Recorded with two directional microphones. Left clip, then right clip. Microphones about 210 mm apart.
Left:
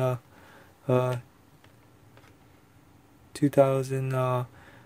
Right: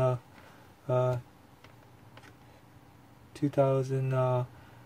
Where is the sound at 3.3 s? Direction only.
55° left (ahead or behind).